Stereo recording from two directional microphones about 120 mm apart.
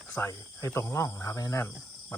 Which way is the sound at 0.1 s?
20° left (ahead or behind).